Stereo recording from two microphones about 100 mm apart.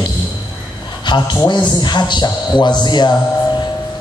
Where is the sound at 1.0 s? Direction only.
50° left (ahead or behind).